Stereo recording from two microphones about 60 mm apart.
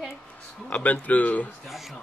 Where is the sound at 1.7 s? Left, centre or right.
Centre.